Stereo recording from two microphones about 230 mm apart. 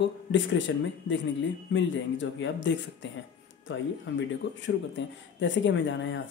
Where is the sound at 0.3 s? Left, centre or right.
Left.